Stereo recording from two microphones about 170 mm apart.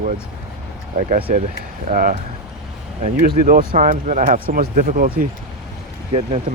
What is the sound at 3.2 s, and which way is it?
Speech, 60° right (ahead or behind).